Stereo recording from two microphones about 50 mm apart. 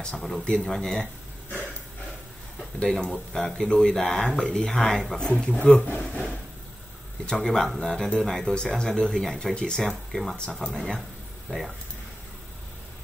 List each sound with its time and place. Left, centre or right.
0.1 s speech: centre
2.8 s speech: centre
5.2 s speech: centre
5.9 s speech: left
7.2 s speech: centre
11.5 s speech: left